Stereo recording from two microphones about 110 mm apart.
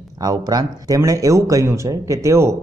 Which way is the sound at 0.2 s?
35° right (ahead or behind).